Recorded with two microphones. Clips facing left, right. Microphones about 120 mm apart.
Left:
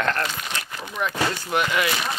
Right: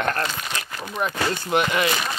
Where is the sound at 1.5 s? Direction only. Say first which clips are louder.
Right 3 dB; 25° right (ahead or behind).